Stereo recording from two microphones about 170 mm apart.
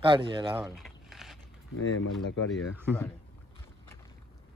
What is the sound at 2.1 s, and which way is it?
Speech, centre (ahead or behind).